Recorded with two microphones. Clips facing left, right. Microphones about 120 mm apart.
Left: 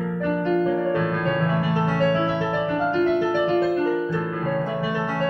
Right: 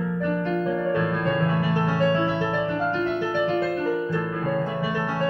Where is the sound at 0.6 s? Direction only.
15° left (ahead or behind).